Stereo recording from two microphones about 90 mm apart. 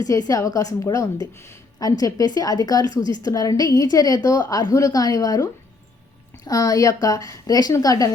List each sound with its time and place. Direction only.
0.0 s a woman's voice: 40° left (ahead or behind)